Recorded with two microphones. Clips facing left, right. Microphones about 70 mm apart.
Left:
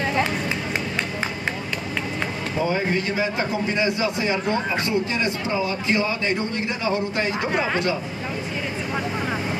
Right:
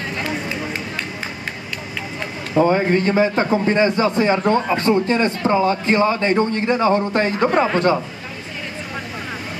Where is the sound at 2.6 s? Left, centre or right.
Right.